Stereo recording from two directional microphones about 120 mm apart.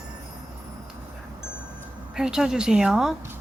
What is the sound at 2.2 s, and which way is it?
Speech, 5° right (ahead or behind).